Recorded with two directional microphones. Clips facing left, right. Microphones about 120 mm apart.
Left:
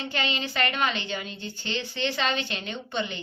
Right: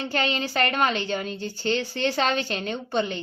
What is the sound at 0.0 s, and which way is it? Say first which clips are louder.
A woman's voice: right 4 dB; 45° right (ahead or behind).